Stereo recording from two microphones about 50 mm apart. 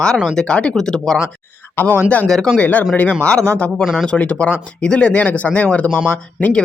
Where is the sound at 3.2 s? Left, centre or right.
Centre.